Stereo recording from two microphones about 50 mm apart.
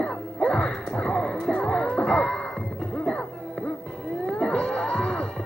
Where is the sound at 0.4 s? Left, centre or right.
Centre.